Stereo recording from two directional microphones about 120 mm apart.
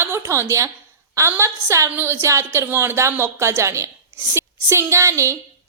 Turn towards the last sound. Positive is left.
turn(degrees=-25)  # may be behind; listen again after turning